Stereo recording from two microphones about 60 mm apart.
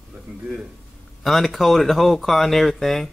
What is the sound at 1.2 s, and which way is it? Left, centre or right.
Speech, centre.